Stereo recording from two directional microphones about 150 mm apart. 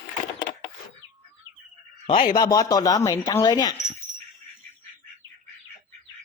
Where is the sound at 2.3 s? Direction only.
25° left (ahead or behind).